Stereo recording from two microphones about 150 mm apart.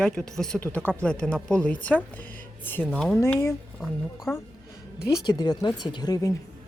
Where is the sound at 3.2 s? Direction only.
15° left (ahead or behind).